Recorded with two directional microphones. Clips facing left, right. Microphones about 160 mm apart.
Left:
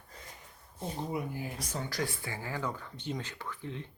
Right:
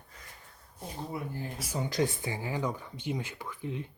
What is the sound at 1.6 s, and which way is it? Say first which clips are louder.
Speech: right 3 dB; 10° right (ahead or behind).